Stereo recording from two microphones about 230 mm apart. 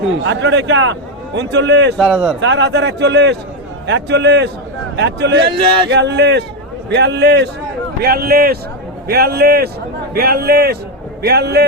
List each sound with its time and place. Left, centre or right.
0.3 s speech: right
2.0 s speech: centre
2.4 s speech: right